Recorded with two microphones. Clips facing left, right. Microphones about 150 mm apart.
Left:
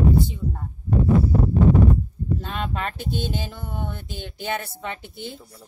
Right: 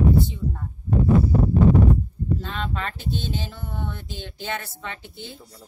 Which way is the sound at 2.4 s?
15° left (ahead or behind).